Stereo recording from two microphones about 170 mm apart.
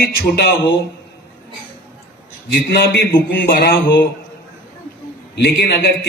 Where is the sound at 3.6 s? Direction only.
65° left (ahead or behind).